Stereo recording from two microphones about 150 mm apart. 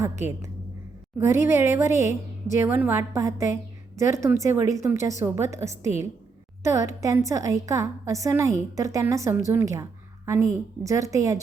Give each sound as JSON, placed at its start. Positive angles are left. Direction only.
{"t": 0.0, "sound": "a woman's voice", "side_deg": -20}